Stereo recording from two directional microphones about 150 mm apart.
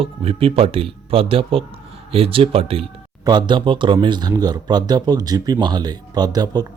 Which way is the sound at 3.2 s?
30° right (ahead or behind).